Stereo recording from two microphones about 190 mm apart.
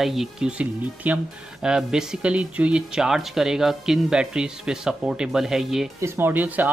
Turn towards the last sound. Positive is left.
turn(degrees=-10)  # may be behind; listen again after turning